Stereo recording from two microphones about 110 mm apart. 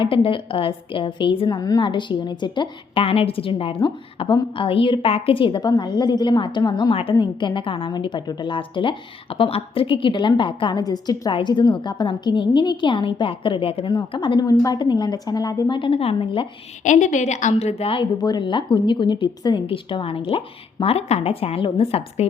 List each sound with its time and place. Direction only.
0.0 s a woman's voice: 55° left (ahead or behind)
2.9 s a woman's voice: 60° left (ahead or behind); by 6.9 s 40° left (ahead or behind)
6.9 s a woman's voice: 55° left (ahead or behind)
7.2 s a woman's voice: 45° left (ahead or behind)
11.3 s a woman's voice: 45° left (ahead or behind)
13.9 s a woman's voice: 45° left (ahead or behind)
15.8 s a woman's voice: 60° left (ahead or behind)
16.8 s a woman's voice: 90° left; by 18.1 s 55° left (ahead or behind)
18.2 s a woman's voice: 40° left (ahead or behind); by 22.3 s 60° left (ahead or behind)